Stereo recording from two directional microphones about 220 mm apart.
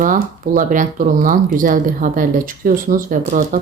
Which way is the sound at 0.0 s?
35° right (ahead or behind).